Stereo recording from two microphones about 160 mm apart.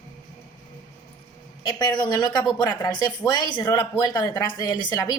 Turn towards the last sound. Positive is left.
turn(degrees=25)  # may be behind; listen again after turning